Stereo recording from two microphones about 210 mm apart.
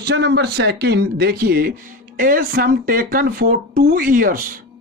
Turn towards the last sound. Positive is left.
turn(degrees=-40)  # may be behind; listen again after turning